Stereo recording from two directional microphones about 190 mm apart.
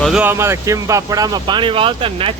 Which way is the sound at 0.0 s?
5° right (ahead or behind).